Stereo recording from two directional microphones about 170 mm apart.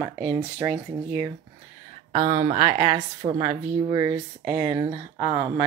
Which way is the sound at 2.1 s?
35° right (ahead or behind).